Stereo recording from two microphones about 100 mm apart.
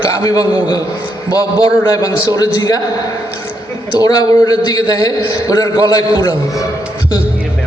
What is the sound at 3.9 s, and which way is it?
A man's voice, 40° left (ahead or behind).